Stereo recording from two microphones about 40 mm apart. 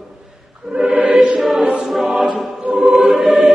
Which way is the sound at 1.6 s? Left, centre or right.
Centre.